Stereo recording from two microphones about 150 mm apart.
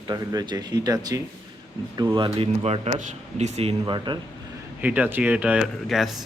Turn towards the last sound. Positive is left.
turn(degrees=0)  # may be behind; listen again after turning